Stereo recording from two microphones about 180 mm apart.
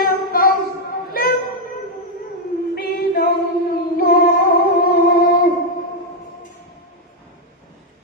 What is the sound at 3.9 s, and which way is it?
Music, 55° left (ahead or behind).